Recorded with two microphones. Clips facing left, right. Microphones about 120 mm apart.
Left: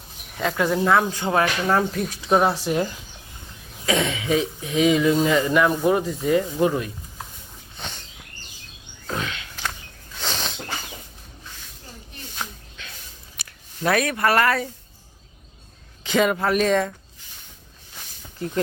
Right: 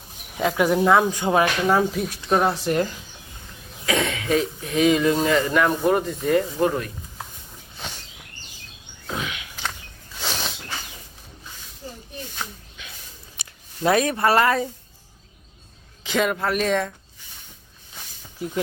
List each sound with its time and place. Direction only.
0.3 s speech: 10° right (ahead or behind)
2.2 s speech: 5° left (ahead or behind)
3.8 s cough: 25° left (ahead or behind)
4.3 s speech: 5° left (ahead or behind)
7.8 s a sound: 5° right (ahead or behind)
9.0 s a sound: 5° right (ahead or behind)
12.8 s a sound: 5° right (ahead or behind)
13.3 s speech: 20° right (ahead or behind)
16.0 s speech: centre (ahead or behind)
18.3 s speech: 5° right (ahead or behind)